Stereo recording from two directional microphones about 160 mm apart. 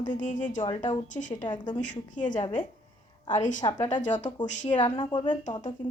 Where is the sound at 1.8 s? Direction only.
50° left (ahead or behind).